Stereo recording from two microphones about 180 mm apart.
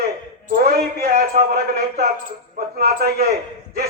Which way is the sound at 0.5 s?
60° right (ahead or behind).